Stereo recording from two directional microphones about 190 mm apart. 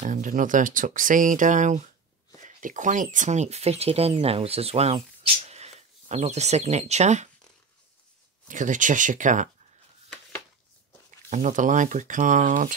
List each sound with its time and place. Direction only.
0.0 s speech: 40° right (ahead or behind)
8.5 s speech: 40° right (ahead or behind)
11.2 s speech: 40° right (ahead or behind)